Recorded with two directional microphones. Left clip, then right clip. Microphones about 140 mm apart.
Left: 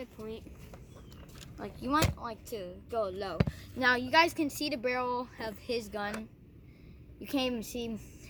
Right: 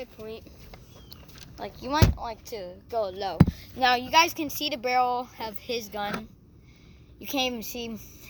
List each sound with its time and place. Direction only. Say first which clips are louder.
0.0 s speech: right 4 dB; 45° left (ahead or behind)
1.5 s speech: right 3 dB; 70° left (ahead or behind); by 3.3 s 55° left (ahead or behind)
3.8 s speech: right 5 dB; 20° left (ahead or behind)
7.2 s speech: right 5 dB; 15° left (ahead or behind)